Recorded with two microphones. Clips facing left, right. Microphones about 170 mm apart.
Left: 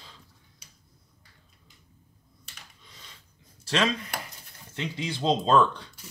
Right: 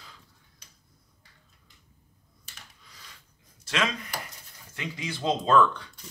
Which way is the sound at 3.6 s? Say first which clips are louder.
Left 3 dB; 35° left (ahead or behind).